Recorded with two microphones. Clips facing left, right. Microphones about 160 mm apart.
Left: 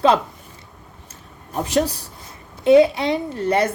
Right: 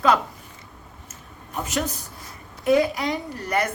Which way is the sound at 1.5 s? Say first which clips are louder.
Left 7 dB; 35° left (ahead or behind).